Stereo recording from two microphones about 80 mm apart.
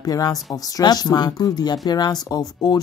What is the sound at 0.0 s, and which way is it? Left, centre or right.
Speech, left.